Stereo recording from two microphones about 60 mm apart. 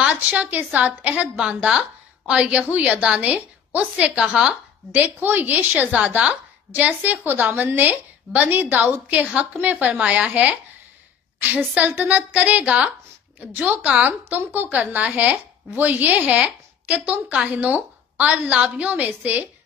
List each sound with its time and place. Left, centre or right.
0.0 s speech: right
4.9 s a woman's voice: right
11.5 s speech: right